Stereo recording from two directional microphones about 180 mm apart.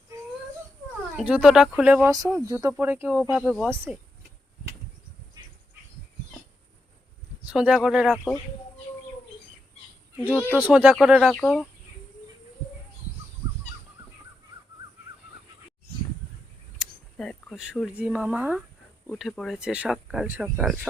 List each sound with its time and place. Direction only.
1.1 s speech: 5° right (ahead or behind)
2.0 s speech: 20° right (ahead or behind)
7.4 s speech: 5° right (ahead or behind)
10.5 s speech: 10° right (ahead or behind)
16.7 s speech: centre (ahead or behind)